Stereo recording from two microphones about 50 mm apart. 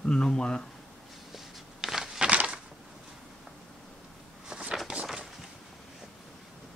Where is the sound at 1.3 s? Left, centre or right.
Centre.